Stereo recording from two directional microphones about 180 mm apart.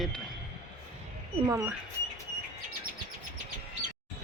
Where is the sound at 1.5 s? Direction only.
15° right (ahead or behind).